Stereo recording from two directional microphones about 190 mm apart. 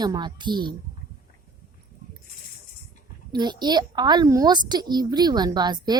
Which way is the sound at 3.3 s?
20° right (ahead or behind).